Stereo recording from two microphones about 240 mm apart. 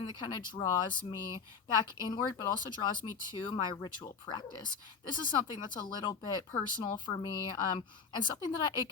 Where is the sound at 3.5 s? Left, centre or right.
Centre.